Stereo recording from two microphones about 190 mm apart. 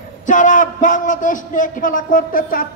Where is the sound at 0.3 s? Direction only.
45° left (ahead or behind).